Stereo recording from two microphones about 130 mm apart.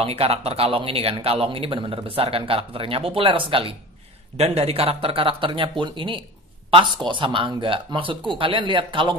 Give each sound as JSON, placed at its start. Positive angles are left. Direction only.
{"t": 0.0, "sound": "speech", "side_deg": -50}